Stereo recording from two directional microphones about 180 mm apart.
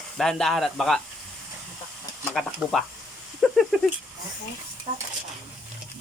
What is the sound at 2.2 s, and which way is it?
Speech, centre (ahead or behind).